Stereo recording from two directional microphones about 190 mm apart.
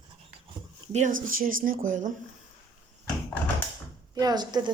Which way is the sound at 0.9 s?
40° right (ahead or behind).